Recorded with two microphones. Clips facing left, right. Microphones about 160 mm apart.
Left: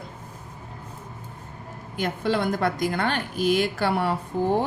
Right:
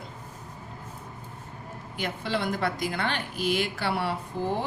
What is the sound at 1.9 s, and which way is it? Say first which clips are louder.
Speech: left 5 dB; 45° left (ahead or behind).